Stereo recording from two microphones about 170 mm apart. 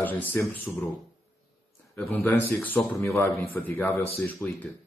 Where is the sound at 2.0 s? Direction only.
10° left (ahead or behind).